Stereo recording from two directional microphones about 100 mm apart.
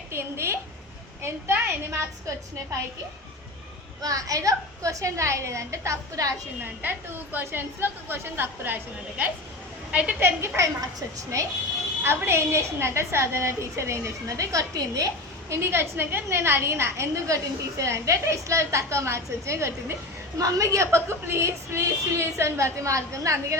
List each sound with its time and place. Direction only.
0.1 s a sound: 25° right (ahead or behind)
1.2 s a woman's voice: 25° right (ahead or behind)
4.0 s a woman's voice: 35° right (ahead or behind)
6.6 s a woman's voice: 20° right (ahead or behind)
11.3 s a woman's voice: 30° right (ahead or behind)